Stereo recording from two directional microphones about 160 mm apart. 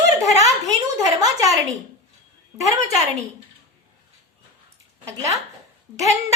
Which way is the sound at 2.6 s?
20° right (ahead or behind).